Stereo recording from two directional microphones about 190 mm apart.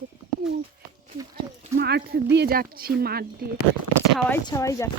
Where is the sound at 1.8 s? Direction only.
60° right (ahead or behind).